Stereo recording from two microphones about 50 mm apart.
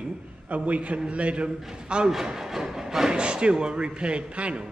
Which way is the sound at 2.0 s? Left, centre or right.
Centre.